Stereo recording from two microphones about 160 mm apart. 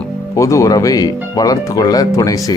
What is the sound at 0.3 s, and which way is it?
Speech, 20° left (ahead or behind).